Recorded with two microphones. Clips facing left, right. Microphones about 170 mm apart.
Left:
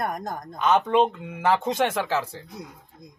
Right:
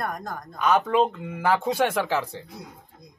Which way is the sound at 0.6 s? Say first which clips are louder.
Left 1 dB; centre (ahead or behind).